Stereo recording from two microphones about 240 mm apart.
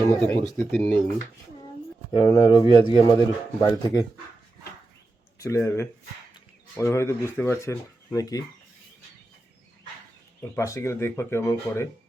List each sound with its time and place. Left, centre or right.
0.4 s speech: centre
2.1 s speech: centre
5.4 s speech: centre
10.5 s speech: centre